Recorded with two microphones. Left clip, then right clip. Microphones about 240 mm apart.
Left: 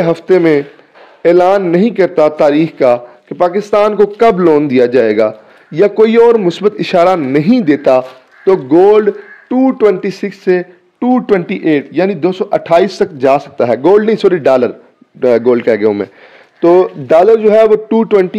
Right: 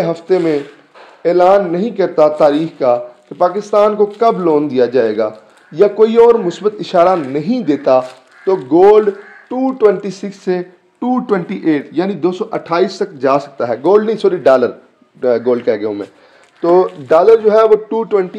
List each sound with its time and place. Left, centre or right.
0.0 s a man's voice: left